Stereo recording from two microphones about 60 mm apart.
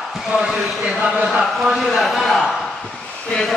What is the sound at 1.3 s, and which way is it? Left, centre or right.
A man's voice, centre.